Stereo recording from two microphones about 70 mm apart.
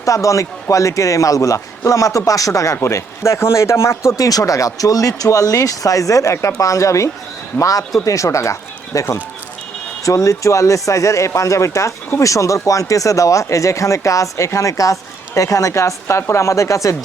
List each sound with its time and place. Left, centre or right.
0.0 s speech: left
2.8 s speech: left
4.2 s speech: left